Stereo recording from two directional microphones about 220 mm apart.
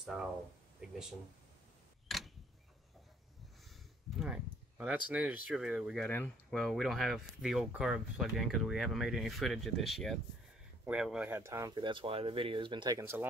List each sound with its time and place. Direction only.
0.0 s speech: 5° right (ahead or behind)
2.0 s a sound: centre (ahead or behind)
4.2 s speech: 5° right (ahead or behind)
6.0 s speech: 10° left (ahead or behind); by 13.3 s 10° right (ahead or behind)